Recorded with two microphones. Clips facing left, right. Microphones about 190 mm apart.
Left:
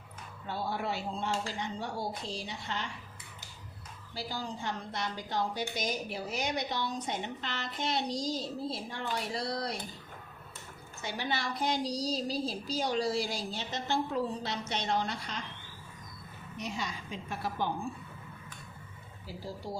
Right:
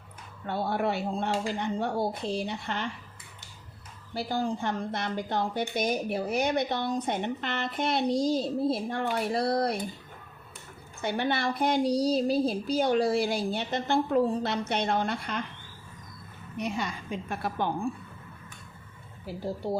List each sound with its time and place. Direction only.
0.4 s speech: 60° right (ahead or behind)
4.1 s speech: 55° right (ahead or behind)
11.0 s speech: 60° right (ahead or behind)
16.6 s speech: 55° right (ahead or behind)
19.2 s speech: 60° right (ahead or behind)